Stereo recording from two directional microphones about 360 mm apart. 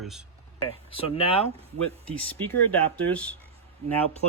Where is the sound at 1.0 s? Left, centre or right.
Centre.